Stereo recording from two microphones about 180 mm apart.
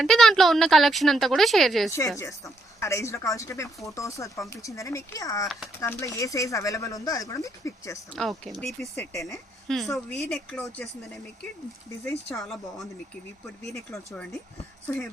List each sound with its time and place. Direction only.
0.0 s speech: centre (ahead or behind)
1.9 s speech: 15° left (ahead or behind)
8.1 s speech: centre (ahead or behind)
12.4 s speech: centre (ahead or behind)
13.7 s speech: 15° left (ahead or behind)